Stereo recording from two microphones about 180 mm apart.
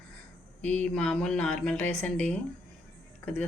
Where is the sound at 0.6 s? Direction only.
10° left (ahead or behind).